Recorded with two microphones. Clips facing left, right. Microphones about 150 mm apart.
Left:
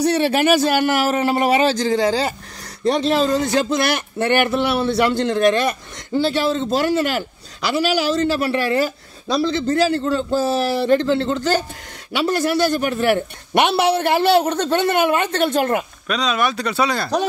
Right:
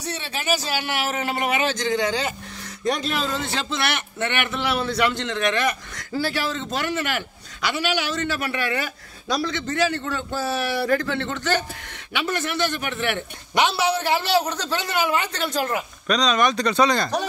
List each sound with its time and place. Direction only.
0.0 s speech: 70° left (ahead or behind); by 13.2 s 40° left (ahead or behind)
13.6 s speech: 60° left (ahead or behind)
16.1 s speech: 5° left (ahead or behind)